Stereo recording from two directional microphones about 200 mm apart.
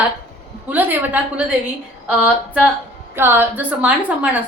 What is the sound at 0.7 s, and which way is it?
A woman's voice, 10° right (ahead or behind).